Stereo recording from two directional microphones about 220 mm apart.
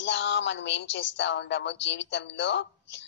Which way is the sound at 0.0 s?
55° left (ahead or behind).